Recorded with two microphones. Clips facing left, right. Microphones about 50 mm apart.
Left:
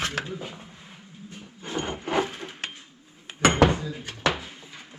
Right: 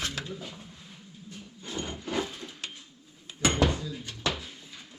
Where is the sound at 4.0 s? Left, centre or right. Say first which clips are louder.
Left 6 dB; left.